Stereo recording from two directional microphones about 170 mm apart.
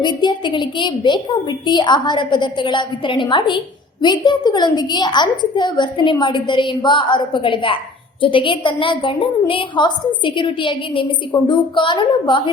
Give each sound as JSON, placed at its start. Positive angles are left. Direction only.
{"t": 0.0, "sound": "a woman's voice", "side_deg": 25}